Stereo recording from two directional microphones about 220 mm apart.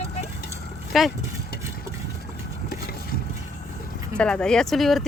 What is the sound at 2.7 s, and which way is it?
Vehicle, 45° left (ahead or behind).